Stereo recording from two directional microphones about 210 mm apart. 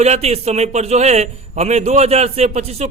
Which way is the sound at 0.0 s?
30° right (ahead or behind).